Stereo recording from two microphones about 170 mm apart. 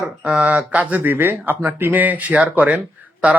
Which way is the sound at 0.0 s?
5° right (ahead or behind).